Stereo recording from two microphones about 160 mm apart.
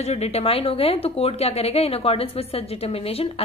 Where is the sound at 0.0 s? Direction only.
40° left (ahead or behind).